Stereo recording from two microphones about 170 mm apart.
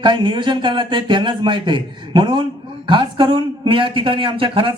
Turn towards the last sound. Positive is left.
turn(degrees=-30)  # may be behind; listen again after turning